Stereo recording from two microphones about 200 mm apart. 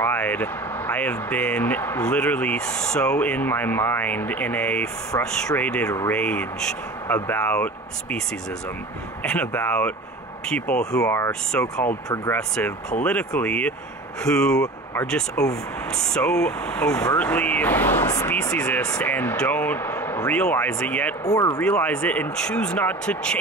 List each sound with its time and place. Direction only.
0.0 s speech: 10° left (ahead or behind)
9.2 s speech: 5° left (ahead or behind)
12.4 s speech: 5° left (ahead or behind)
21.5 s speech: 5° left (ahead or behind)